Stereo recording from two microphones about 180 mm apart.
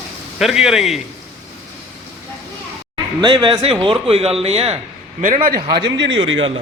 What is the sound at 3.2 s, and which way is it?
Speech, 25° right (ahead or behind).